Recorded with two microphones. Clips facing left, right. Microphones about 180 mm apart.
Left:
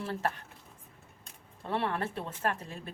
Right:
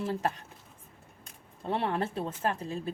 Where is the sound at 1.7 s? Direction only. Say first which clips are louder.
Right 2 dB; 25° right (ahead or behind).